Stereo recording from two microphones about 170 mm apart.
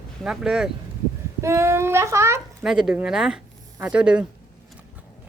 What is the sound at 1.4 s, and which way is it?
Child singing, 15° right (ahead or behind).